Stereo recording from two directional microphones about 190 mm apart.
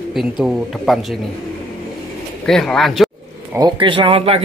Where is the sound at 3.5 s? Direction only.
25° right (ahead or behind).